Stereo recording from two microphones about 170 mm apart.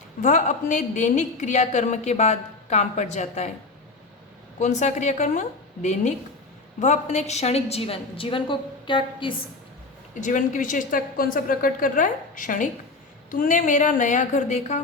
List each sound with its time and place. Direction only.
0.2 s a woman's voice: 45° left (ahead or behind)
4.6 s a woman's voice: 45° left (ahead or behind); by 9.3 s 30° left (ahead or behind)
10.2 s a woman's voice: 45° left (ahead or behind)